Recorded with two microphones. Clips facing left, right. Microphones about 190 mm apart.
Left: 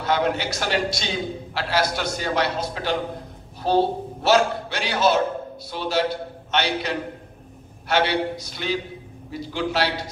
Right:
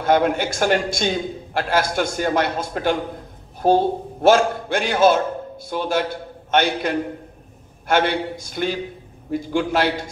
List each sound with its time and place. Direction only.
0.0 s a man's voice: 50° right (ahead or behind)